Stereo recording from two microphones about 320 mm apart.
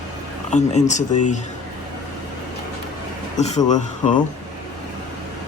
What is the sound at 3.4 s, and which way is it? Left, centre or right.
Speech, left.